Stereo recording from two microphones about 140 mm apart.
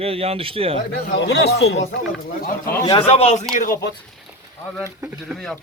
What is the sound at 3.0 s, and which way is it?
Speech, 50° left (ahead or behind).